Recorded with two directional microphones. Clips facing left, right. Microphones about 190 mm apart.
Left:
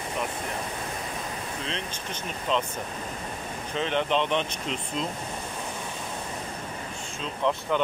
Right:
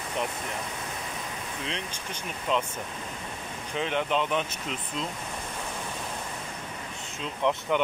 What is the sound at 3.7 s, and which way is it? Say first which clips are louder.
Speech: left 2 dB; 10° right (ahead or behind).